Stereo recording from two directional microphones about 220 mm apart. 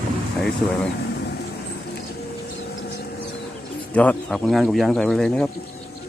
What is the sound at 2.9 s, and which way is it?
Vehicle, 45° left (ahead or behind).